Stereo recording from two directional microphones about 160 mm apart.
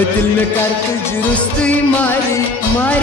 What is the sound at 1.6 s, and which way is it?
Music, 10° left (ahead or behind).